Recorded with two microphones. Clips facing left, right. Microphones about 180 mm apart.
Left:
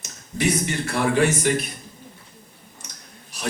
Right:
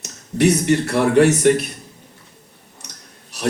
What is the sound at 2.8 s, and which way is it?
Clicking, 70° right (ahead or behind).